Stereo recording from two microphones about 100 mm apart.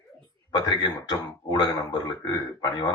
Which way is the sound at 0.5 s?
45° left (ahead or behind).